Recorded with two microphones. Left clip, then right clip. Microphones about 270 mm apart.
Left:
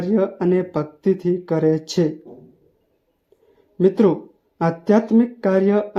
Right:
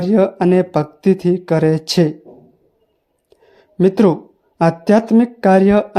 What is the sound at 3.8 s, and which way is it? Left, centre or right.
Speech, right.